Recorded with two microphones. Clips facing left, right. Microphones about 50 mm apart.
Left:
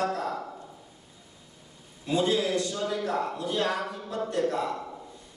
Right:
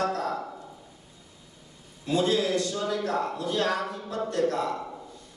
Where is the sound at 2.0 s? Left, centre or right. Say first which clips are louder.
Right 1 dB; centre.